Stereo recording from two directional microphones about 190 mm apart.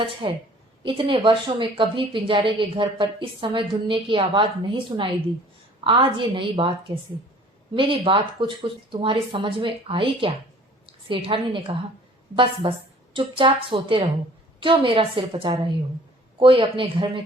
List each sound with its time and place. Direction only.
0.0 s a woman's voice: 30° right (ahead or behind)